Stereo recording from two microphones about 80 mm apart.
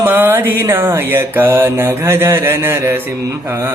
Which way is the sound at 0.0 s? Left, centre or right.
Right.